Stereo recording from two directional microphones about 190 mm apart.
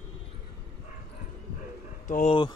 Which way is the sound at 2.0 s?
40° left (ahead or behind).